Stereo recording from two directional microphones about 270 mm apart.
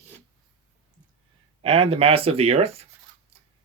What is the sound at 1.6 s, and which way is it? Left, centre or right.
Speech, right.